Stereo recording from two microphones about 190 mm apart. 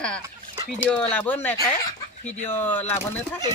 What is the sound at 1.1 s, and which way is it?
Speech, 10° left (ahead or behind).